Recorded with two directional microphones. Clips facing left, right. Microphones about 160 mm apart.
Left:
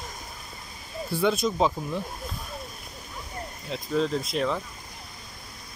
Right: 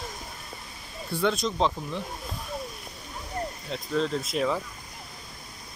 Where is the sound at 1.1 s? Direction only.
5° left (ahead or behind).